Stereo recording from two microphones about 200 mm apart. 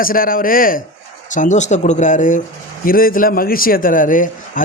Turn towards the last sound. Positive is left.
turn(degrees=40)  # may be behind; listen again after turning